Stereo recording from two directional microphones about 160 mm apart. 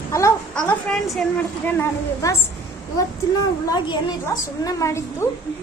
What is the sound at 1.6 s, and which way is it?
Speech, 15° left (ahead or behind).